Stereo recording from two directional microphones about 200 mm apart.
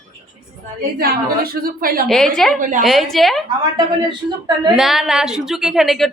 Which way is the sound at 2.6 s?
40° right (ahead or behind).